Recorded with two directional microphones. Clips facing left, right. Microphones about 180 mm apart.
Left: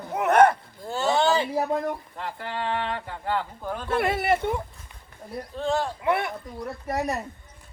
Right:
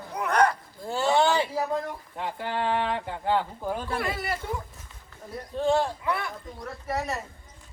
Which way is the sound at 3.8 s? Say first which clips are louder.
Left 6 dB; 25° left (ahead or behind).